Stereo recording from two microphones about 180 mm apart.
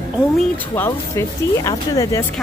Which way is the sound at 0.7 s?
15° left (ahead or behind).